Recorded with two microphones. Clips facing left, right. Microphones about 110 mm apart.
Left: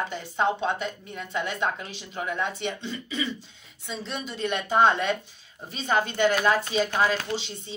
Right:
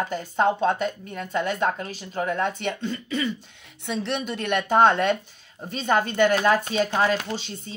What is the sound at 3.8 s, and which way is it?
Speech, 70° right (ahead or behind).